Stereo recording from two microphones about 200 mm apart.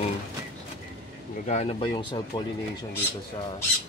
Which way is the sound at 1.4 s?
35° left (ahead or behind).